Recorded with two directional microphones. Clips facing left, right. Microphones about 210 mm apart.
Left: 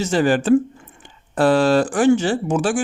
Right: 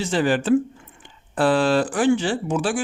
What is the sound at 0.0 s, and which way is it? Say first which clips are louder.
Speech: left 3 dB; 45° left (ahead or behind).